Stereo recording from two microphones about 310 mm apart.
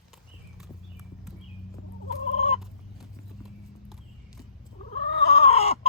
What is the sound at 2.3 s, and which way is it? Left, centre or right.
Fowl, centre.